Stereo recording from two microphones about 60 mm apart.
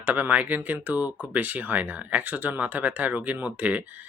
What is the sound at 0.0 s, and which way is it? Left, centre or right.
Speech, right.